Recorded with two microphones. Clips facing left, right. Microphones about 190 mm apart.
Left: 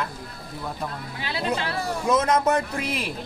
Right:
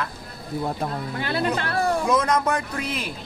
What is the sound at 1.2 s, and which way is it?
Speech, 55° right (ahead or behind).